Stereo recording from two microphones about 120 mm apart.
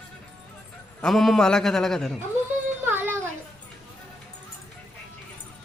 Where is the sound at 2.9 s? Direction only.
15° right (ahead or behind).